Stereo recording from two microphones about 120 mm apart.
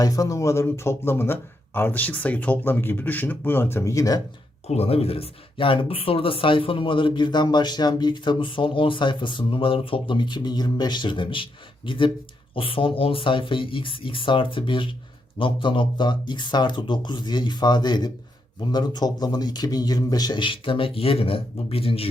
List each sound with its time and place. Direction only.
0.0 s speech: 30° left (ahead or behind)
4.6 s a man's voice: 60° left (ahead or behind)